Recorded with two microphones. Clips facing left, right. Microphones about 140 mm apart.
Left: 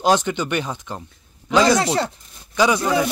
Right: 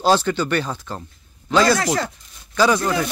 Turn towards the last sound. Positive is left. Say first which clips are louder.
# even
turn(degrees=15)  # may be behind; listen again after turning